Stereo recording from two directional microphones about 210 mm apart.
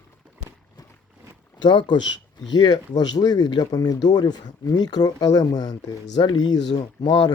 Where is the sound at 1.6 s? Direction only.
20° left (ahead or behind).